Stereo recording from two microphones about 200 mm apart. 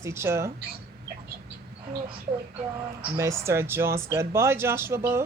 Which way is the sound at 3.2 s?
15° right (ahead or behind).